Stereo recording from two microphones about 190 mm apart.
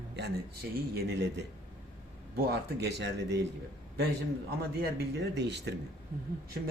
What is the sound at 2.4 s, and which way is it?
Speech, 60° right (ahead or behind).